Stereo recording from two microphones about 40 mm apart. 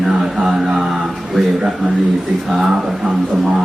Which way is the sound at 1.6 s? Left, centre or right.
Centre.